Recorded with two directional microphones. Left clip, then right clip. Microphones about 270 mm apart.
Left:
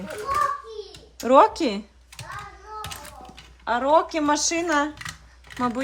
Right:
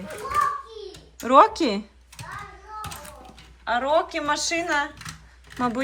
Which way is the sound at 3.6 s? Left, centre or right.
Centre.